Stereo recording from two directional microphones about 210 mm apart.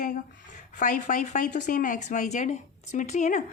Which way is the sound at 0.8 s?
35° left (ahead or behind).